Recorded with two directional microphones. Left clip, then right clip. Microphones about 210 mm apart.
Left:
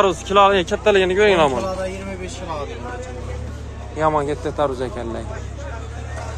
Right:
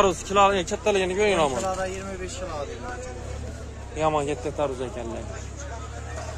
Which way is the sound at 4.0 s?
20° right (ahead or behind).